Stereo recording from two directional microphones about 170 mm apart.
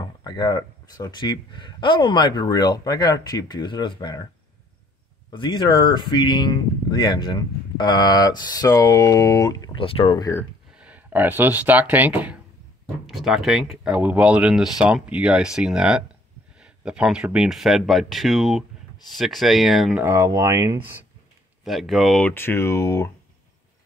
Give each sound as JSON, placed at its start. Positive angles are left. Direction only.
{"t": 0.0, "sound": "speech", "side_deg": 25}
{"t": 5.3, "sound": "speech", "side_deg": 30}
{"t": 10.8, "sound": "speech", "side_deg": -10}
{"t": 20.0, "sound": "speech", "side_deg": -15}
{"t": 21.6, "sound": "speech", "side_deg": 0}